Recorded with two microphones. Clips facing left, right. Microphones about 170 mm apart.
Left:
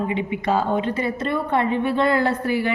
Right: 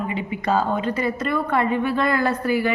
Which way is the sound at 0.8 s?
25° left (ahead or behind).